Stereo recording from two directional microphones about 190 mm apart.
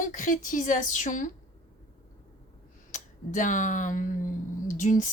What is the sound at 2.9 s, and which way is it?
Speech, 40° left (ahead or behind).